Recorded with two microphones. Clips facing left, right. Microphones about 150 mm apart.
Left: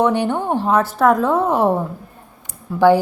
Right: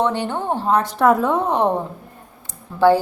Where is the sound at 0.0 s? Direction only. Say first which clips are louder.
Left 4 dB; 15° left (ahead or behind).